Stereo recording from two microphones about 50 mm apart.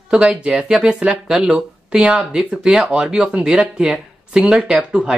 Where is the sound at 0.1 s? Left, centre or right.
Centre.